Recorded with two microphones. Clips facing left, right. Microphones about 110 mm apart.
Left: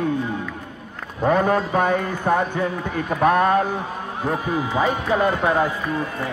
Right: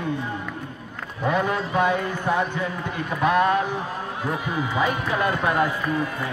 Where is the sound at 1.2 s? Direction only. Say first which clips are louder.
Left 5 dB; 40° left (ahead or behind).